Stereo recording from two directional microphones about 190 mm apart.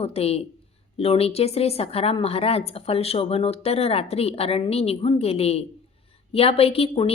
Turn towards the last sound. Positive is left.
turn(degrees=30)  # may be behind; listen again after turning